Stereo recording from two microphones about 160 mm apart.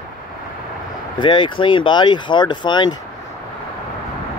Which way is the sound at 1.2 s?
30° left (ahead or behind).